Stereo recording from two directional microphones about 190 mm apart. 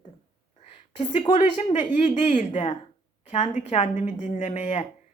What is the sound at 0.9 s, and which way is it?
A woman's voice, 35° left (ahead or behind).